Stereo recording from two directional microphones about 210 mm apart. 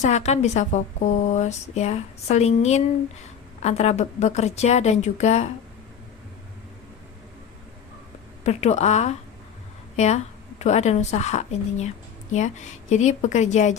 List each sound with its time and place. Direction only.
0.0 s speech: 35° left (ahead or behind)
8.4 s a woman's voice: 30° left (ahead or behind)